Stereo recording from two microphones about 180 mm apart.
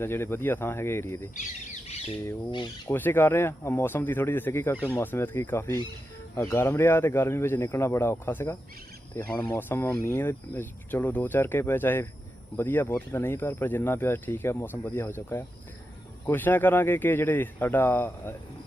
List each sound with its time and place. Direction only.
0.0 s speech: 15° left (ahead or behind)
1.4 s bird: 40° left (ahead or behind)
2.5 s speech: 25° left (ahead or behind)
2.9 s speech: 10° left (ahead or behind)